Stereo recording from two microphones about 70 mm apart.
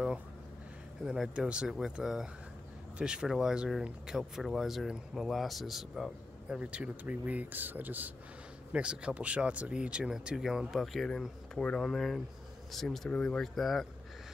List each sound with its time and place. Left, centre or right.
1.0 s speech: centre
6.6 s speech: centre
8.7 s speech: centre